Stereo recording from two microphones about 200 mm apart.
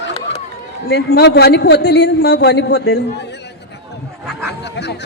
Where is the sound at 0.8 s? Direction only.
55° left (ahead or behind).